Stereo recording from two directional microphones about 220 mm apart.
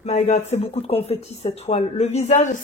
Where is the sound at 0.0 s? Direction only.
30° left (ahead or behind).